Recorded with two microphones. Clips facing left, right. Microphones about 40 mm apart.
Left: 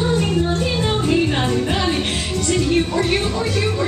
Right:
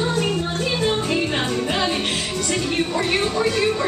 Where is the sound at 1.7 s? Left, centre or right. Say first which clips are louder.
Left 1 dB; centre.